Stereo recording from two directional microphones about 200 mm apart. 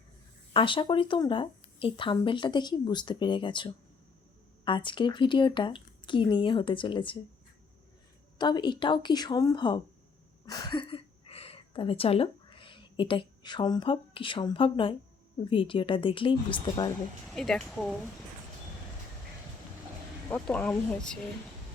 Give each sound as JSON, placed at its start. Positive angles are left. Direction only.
{"t": 0.5, "sound": "speech", "side_deg": 25}
{"t": 8.4, "sound": "a woman's voice", "side_deg": 20}
{"t": 17.2, "sound": "speech", "side_deg": 5}
{"t": 20.3, "sound": "speech", "side_deg": 5}